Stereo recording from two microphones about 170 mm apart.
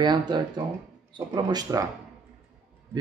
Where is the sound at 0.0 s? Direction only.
25° right (ahead or behind).